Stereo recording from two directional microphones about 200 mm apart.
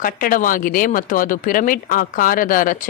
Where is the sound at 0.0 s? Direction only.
45° left (ahead or behind).